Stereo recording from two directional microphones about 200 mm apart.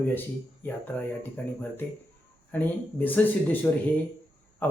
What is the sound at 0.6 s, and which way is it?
Speech, 10° left (ahead or behind).